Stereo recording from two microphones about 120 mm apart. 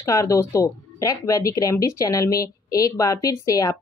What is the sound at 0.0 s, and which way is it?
Speech, 25° left (ahead or behind).